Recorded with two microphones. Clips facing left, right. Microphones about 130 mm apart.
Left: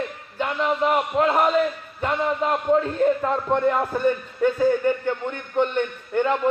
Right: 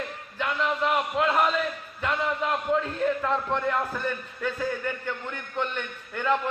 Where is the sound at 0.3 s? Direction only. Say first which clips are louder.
Left 4 dB; 35° left (ahead or behind).